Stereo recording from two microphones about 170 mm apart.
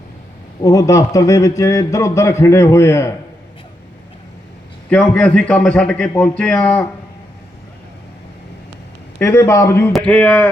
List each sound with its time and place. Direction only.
0.6 s a man's voice: 20° left (ahead or behind)
4.9 s a man's voice: 10° left (ahead or behind)
9.1 s a man's voice: 15° left (ahead or behind)